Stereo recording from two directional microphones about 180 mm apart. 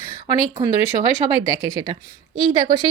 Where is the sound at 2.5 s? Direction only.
20° right (ahead or behind).